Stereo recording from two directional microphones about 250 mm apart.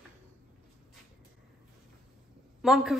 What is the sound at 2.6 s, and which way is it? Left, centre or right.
Speech, centre.